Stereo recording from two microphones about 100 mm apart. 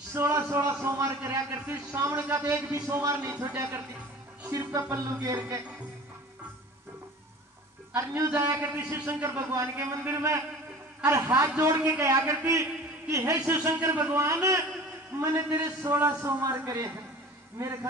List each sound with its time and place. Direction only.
0.1 s a man's voice: 30° right (ahead or behind)
8.3 s a man's voice: 25° right (ahead or behind)